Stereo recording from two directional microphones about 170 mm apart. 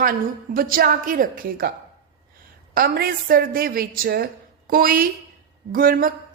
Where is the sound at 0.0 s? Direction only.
60° right (ahead or behind).